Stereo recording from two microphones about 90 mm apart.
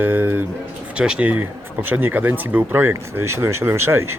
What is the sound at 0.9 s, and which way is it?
Speech, 10° right (ahead or behind).